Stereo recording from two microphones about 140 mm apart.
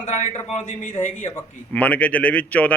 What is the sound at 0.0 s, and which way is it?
Speech, 55° left (ahead or behind).